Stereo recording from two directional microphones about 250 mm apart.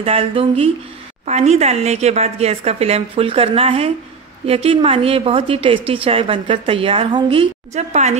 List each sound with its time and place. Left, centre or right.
0.0 s a woman's voice: right